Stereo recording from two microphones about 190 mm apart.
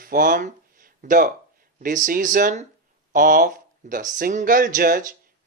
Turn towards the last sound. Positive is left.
turn(degrees=-45)  # may be behind; listen again after turning